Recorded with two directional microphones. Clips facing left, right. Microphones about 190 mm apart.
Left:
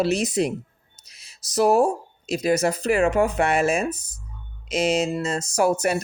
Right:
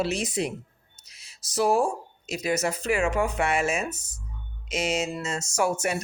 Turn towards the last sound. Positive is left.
turn(degrees=40)  # may be behind; listen again after turning